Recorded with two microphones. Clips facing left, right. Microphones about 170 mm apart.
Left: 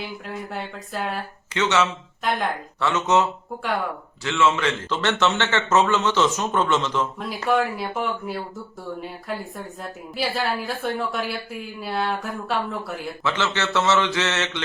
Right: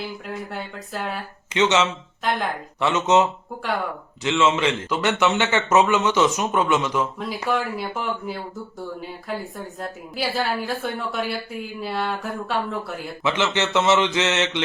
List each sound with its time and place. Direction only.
0.5 s speech: centre (ahead or behind)
1.5 s speech: 20° right (ahead or behind)
2.2 s speech: centre (ahead or behind)
2.8 s a man's voice: 20° right (ahead or behind)
7.4 s speech: centre (ahead or behind)
13.2 s a man's voice: 15° right (ahead or behind)